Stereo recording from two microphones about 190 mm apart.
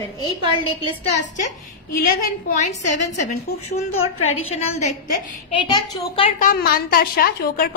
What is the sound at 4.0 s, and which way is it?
Speech, 90° left.